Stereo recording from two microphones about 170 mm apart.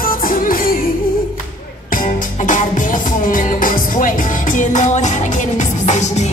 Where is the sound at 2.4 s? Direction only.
50° left (ahead or behind).